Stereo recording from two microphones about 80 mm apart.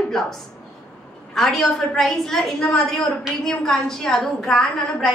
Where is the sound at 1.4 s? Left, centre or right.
Centre.